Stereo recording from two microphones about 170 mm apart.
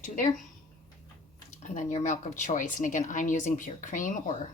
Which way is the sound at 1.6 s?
45° left (ahead or behind).